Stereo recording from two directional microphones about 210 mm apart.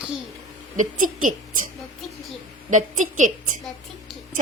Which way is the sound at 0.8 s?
40° right (ahead or behind).